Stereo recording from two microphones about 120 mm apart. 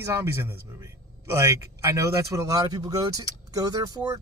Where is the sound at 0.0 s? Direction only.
20° right (ahead or behind).